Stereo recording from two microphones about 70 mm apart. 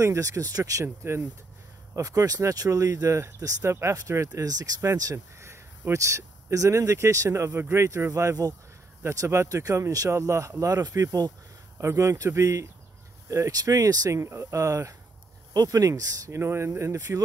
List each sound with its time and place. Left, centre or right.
0.0 s speech: right
0.8 s speech: right
2.0 s speech: right
4.4 s speech: right
5.1 s speech: right
11.8 s speech: right
13.5 s speech: right
14.2 s speech: right
15.5 s speech: right